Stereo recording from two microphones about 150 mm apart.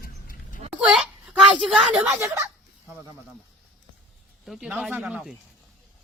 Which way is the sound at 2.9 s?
20° right (ahead or behind).